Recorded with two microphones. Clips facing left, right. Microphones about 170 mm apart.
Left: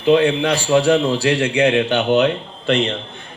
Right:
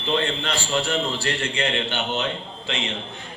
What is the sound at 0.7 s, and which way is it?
A man's voice, 90° left.